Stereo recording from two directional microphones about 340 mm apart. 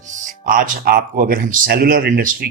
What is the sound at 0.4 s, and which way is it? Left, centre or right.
Speech, right.